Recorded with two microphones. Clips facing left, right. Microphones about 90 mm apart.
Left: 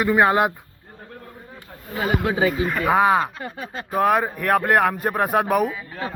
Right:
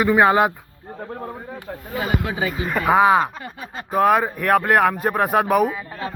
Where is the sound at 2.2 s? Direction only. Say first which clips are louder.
Left 4 dB; 30° left (ahead or behind).